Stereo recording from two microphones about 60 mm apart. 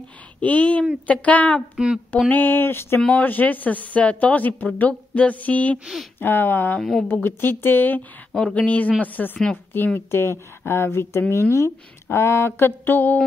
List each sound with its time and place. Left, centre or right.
0.4 s speech: left
3.1 s speech: left
6.1 s speech: left
6.8 s speech: centre
7.2 s speech: left
9.9 s speech: left